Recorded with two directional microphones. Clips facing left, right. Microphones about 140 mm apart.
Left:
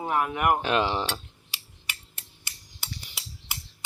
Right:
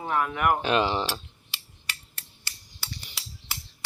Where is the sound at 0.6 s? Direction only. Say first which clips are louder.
Right 1 dB; centre (ahead or behind).